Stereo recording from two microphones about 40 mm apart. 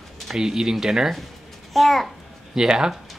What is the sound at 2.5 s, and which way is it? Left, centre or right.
Speech, centre.